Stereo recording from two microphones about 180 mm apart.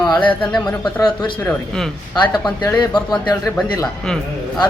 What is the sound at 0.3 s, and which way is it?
Speech, 5° left (ahead or behind).